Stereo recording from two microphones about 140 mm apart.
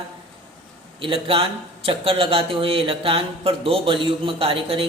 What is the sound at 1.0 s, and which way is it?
A man's voice, 40° right (ahead or behind).